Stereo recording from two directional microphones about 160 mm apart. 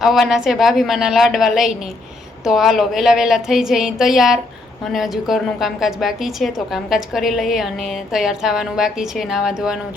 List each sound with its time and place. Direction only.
0.0 s a woman's voice: centre (ahead or behind)